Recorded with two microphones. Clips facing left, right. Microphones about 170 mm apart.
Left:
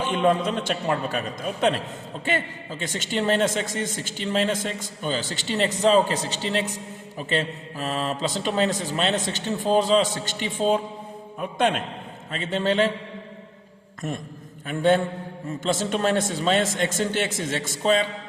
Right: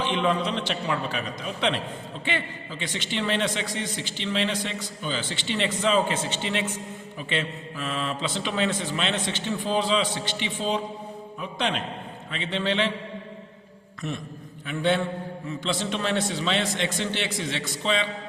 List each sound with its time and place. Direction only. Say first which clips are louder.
0.0 s a man's voice: left 3 dB; 45° left (ahead or behind)
14.7 s a man's voice: left 4 dB; 45° left (ahead or behind)